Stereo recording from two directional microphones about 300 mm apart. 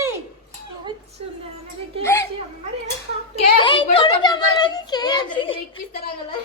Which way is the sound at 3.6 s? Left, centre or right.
Centre.